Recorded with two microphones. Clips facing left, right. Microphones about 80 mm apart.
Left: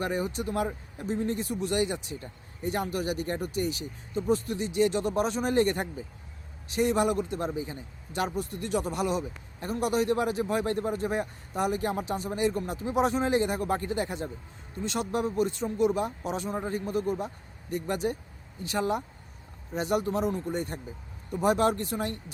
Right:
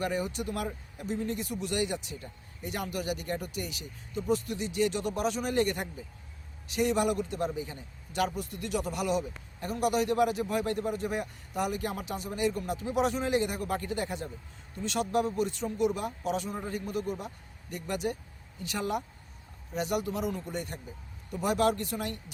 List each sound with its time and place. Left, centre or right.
0.0 s a man's voice: left